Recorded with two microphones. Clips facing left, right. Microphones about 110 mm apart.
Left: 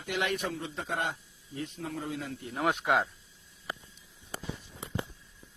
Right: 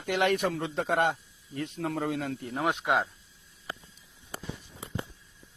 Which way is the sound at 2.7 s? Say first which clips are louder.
Even; 20° right (ahead or behind).